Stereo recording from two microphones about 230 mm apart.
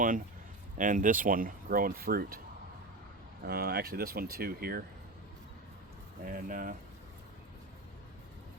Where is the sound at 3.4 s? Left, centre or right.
Right.